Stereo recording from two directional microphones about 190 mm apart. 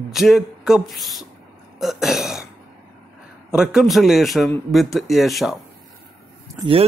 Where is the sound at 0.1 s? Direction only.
Centre (ahead or behind).